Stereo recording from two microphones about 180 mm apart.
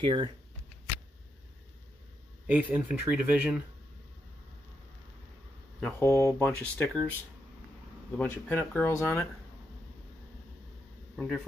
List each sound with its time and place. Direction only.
0.0 s speech: 25° right (ahead or behind)
2.4 s speech: 10° right (ahead or behind)
5.8 s speech: 10° left (ahead or behind)
8.2 s speech: 10° left (ahead or behind)
11.1 s a man's voice: 5° left (ahead or behind)